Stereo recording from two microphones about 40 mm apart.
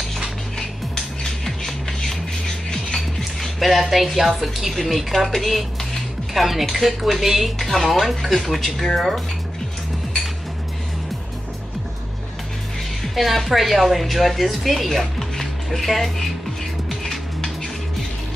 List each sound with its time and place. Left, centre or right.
0.6 s music: centre
3.3 s a woman's voice: centre
13.1 s a woman's voice: centre
17.0 s music: centre